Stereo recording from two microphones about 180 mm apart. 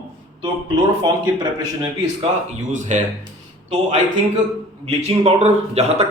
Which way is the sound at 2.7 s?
40° right (ahead or behind).